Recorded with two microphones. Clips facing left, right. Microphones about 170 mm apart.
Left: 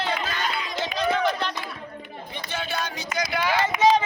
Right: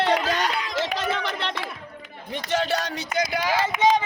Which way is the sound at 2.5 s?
85° right.